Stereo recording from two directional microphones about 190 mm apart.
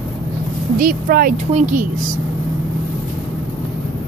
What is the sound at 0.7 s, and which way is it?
A woman's voice, 50° right (ahead or behind).